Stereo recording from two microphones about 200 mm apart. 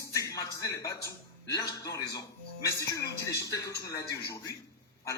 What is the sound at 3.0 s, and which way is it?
Speech, 55° left (ahead or behind).